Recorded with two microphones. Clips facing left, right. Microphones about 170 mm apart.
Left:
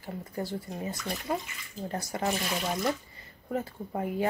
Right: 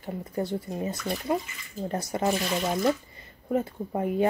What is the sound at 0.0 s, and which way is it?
Speech, 20° right (ahead or behind).